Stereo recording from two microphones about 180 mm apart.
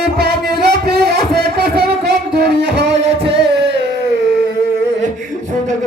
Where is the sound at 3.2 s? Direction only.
75° right (ahead or behind).